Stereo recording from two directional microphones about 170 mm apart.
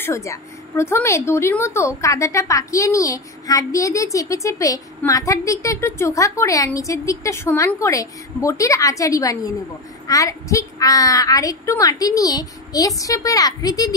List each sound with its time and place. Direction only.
0.0 s a woman's voice: 15° left (ahead or behind)